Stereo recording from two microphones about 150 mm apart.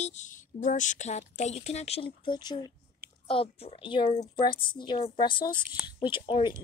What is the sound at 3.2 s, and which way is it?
Speech, 40° left (ahead or behind).